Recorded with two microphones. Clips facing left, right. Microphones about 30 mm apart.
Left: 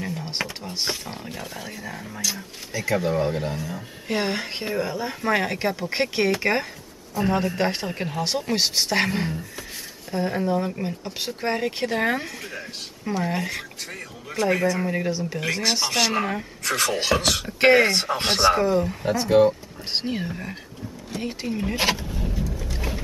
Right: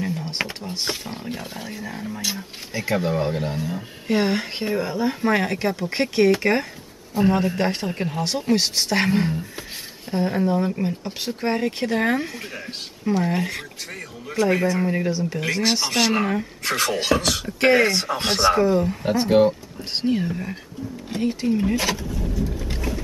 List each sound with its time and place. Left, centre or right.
0.0 s a sound: centre
0.9 s speech: centre
2.2 s speech: right
3.0 s speech: centre
3.5 s speech: centre
4.1 s speech: centre
12.4 s speech: centre
17.1 s speech: centre
19.2 s speech: centre
19.8 s speech: centre
21.7 s speech: left
22.8 s boat: centre